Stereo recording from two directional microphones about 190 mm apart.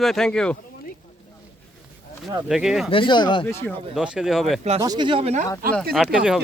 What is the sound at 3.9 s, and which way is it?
Speech, 5° right (ahead or behind).